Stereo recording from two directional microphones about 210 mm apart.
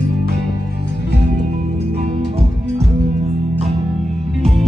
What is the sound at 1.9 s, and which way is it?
Music, 30° right (ahead or behind).